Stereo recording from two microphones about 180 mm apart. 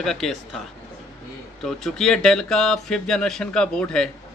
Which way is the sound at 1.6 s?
Centre (ahead or behind).